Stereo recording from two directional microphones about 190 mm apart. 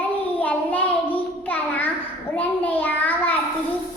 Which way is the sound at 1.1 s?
10° left (ahead or behind).